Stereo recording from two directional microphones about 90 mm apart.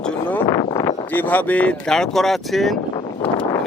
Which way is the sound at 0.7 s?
45° left (ahead or behind).